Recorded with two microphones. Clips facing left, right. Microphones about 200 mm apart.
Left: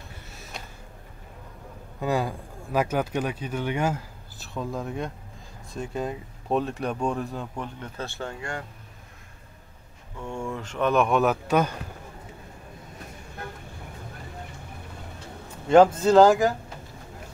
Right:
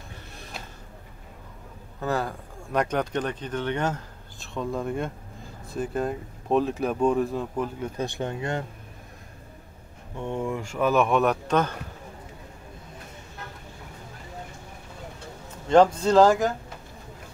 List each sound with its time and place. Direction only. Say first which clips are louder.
0.3 s a sound: right 1 dB; 5° left (ahead or behind)
2.0 s speech: left 1 dB; 15° left (ahead or behind); by 7.9 s 5° right (ahead or behind)
8.0 s speech: right 4 dB; 20° right (ahead or behind)
10.1 s speech: right 3 dB; 20° right (ahead or behind); by 11.7 s 10° left (ahead or behind)
15.7 s speech: left 2 dB; 5° left (ahead or behind)